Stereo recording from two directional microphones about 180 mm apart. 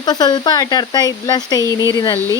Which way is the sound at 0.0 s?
25° left (ahead or behind).